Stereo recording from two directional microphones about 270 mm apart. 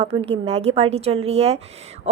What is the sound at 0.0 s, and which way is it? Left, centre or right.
A woman's voice, right.